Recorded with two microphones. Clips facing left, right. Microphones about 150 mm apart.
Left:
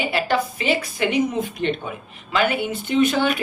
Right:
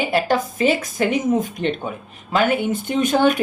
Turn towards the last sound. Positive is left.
turn(degrees=-50)  # may be behind; listen again after turning